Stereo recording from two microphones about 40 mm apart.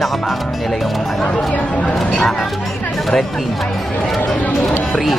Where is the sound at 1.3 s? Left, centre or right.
Left.